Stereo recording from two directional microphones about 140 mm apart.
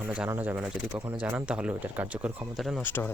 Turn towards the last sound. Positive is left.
turn(degrees=15)  # may be behind; listen again after turning